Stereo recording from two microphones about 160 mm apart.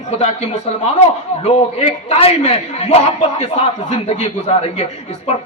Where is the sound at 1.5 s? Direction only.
40° left (ahead or behind).